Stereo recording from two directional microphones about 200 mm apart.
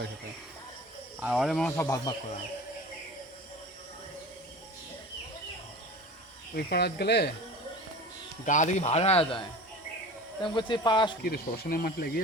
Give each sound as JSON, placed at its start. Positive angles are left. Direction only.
{"t": 1.2, "sound": "speech", "side_deg": 0}
{"t": 1.7, "sound": "speech", "side_deg": 15}
{"t": 6.5, "sound": "speech", "side_deg": 55}
{"t": 8.4, "sound": "speech", "side_deg": 40}
{"t": 11.2, "sound": "speech", "side_deg": 50}